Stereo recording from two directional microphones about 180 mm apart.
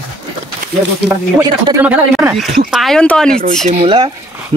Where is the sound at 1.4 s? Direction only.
20° right (ahead or behind).